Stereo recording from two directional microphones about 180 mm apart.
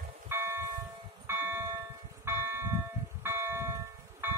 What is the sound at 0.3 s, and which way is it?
Church bell, 15° right (ahead or behind).